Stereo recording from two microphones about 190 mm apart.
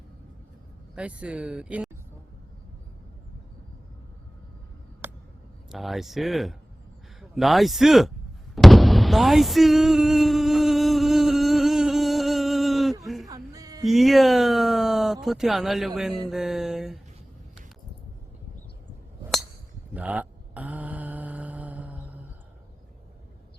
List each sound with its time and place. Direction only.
0.9 s speech: 5° right (ahead or behind)
5.0 s vehicle: 10° right (ahead or behind)
5.7 s speech: centre (ahead or behind)
8.5 s a sound: centre (ahead or behind)
13.2 s music: 20° right (ahead or behind)
13.8 s speech: centre (ahead or behind)
19.9 s mantra: 10° right (ahead or behind)